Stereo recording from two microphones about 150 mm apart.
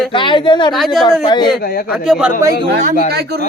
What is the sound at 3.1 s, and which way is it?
Speech, 90° right.